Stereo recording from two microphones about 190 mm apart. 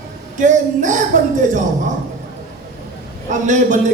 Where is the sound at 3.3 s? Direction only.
40° right (ahead or behind).